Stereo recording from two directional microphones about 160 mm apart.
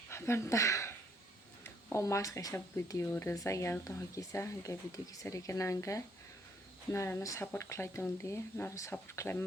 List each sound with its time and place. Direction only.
0.1 s speech: 15° left (ahead or behind)